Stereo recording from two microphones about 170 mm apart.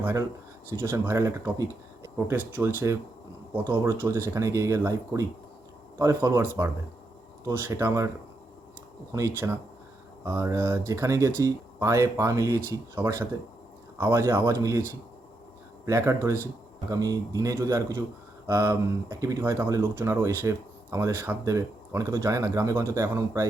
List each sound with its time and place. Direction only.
0.0 s speech: 15° right (ahead or behind)
9.1 s speech: 15° right (ahead or behind)
15.9 s speech: 15° right (ahead or behind)